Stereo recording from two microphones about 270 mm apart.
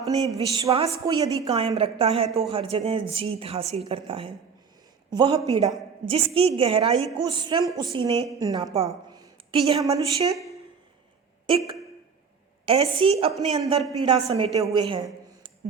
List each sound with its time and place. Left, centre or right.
0.3 s a woman's voice: centre
11.4 s a woman's voice: centre